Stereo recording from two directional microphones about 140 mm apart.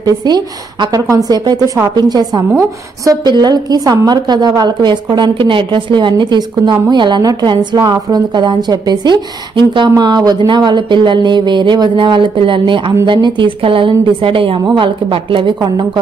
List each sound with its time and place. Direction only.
0.0 s a woman's voice: 30° right (ahead or behind)